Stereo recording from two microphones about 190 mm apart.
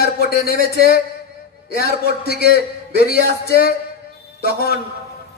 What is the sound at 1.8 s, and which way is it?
A man's voice, 55° left (ahead or behind).